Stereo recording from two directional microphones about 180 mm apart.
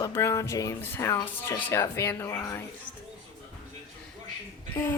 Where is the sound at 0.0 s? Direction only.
15° left (ahead or behind).